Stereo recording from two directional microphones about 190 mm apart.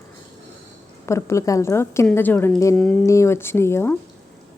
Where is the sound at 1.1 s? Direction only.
15° left (ahead or behind).